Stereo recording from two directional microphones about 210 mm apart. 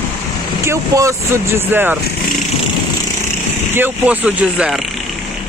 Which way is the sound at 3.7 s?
10° right (ahead or behind).